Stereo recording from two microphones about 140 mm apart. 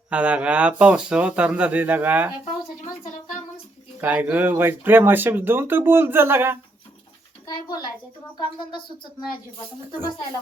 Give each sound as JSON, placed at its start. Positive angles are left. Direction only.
{"t": 0.1, "sound": "speech", "side_deg": -10}
{"t": 4.0, "sound": "speech", "side_deg": -10}
{"t": 7.4, "sound": "a sound", "side_deg": 30}